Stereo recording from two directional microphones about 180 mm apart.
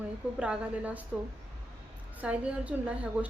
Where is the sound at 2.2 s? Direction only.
5° right (ahead or behind).